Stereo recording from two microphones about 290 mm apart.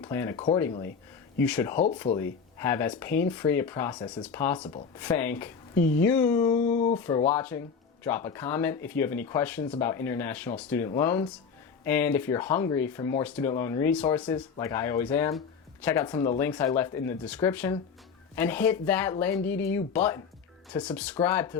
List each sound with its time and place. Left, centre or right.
0.0 s speech: centre